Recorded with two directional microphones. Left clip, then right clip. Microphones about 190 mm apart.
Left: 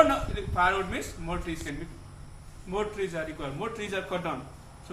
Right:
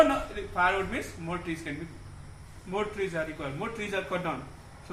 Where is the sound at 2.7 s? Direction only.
15° right (ahead or behind).